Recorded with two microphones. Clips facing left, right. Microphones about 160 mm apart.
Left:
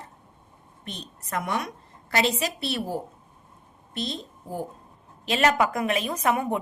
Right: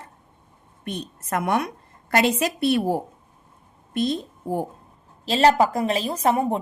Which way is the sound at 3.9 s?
50° right (ahead or behind).